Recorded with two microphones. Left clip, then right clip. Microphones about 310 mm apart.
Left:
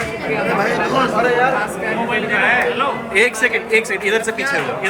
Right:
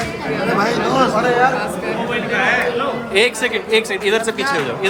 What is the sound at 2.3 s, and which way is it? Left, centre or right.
Speech, centre.